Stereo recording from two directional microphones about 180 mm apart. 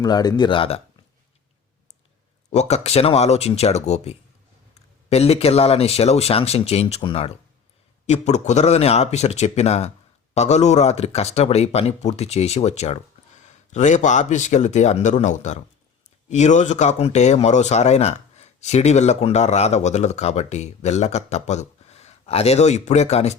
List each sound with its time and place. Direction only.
0.0 s speech: 20° left (ahead or behind)
2.5 s speech: 35° left (ahead or behind)